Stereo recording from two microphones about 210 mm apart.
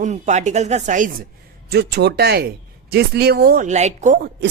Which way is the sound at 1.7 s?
50° right (ahead or behind).